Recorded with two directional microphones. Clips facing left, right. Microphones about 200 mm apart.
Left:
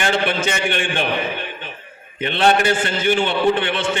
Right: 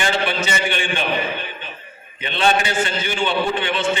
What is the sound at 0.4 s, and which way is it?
Speech, 55° left (ahead or behind).